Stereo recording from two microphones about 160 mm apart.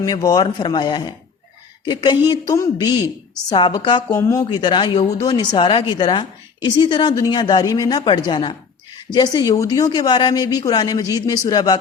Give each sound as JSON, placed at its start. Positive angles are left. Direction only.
{"t": 0.0, "sound": "a woman's voice", "side_deg": 25}
{"t": 4.1, "sound": "a woman's voice", "side_deg": 15}